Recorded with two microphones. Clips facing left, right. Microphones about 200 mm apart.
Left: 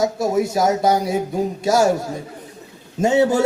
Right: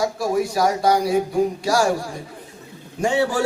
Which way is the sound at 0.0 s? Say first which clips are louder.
Left 2 dB; 20° left (ahead or behind).